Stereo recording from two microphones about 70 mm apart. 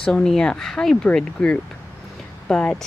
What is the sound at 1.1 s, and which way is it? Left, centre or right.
Speech, centre.